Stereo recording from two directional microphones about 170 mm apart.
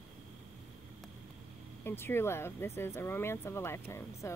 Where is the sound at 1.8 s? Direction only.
15° left (ahead or behind).